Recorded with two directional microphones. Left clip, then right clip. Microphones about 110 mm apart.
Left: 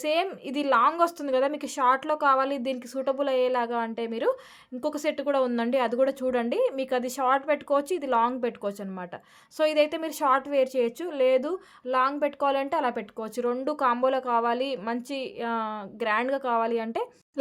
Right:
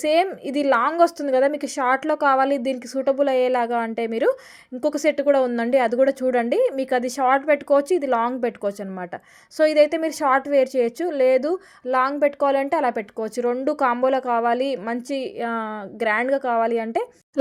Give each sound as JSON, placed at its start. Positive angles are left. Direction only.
{"t": 0.0, "sound": "a woman's voice", "side_deg": -35}
{"t": 17.4, "sound": "speech", "side_deg": -80}